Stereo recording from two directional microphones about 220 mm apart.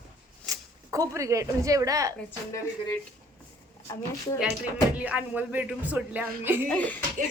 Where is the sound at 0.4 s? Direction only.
15° right (ahead or behind).